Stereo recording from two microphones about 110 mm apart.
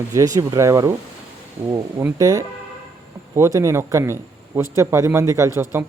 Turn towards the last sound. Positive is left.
turn(degrees=-25)  # may be behind; listen again after turning